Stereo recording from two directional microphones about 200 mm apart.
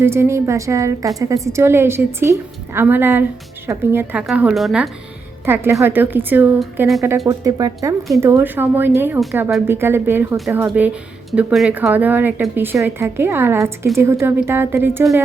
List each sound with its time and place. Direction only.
0.0 s a woman's voice: 10° right (ahead or behind)
7.3 s speech: 15° right (ahead or behind)